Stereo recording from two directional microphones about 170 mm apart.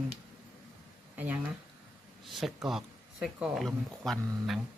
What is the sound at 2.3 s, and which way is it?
Speech, centre (ahead or behind).